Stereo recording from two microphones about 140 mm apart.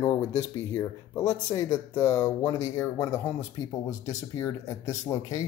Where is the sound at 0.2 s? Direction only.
20° left (ahead or behind).